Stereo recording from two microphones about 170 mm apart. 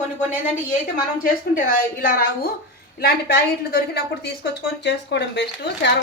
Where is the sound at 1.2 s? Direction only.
55° left (ahead or behind).